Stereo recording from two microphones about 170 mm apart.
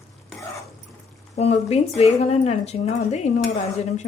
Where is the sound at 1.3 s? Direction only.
40° left (ahead or behind).